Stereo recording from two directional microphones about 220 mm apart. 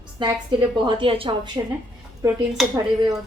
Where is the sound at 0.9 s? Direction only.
25° right (ahead or behind).